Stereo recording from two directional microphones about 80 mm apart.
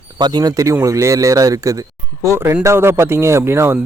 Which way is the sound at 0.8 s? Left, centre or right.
Right.